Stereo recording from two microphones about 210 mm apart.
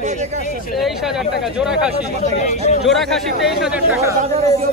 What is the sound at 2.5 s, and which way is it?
Speech, 35° left (ahead or behind).